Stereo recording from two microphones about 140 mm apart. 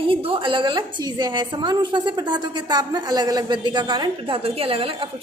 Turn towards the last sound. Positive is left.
turn(degrees=-40)  # may be behind; listen again after turning